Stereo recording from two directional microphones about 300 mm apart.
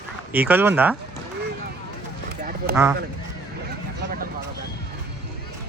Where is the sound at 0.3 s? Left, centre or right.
Centre.